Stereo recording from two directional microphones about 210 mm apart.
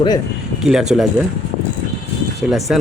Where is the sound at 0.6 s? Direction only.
Centre (ahead or behind).